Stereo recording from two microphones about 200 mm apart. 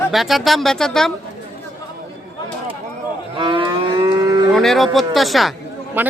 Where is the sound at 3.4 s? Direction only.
25° right (ahead or behind).